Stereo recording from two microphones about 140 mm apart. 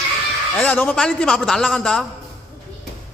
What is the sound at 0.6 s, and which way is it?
A man's voice, 10° left (ahead or behind).